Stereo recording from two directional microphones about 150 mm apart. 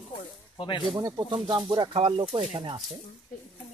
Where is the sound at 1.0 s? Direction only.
25° right (ahead or behind).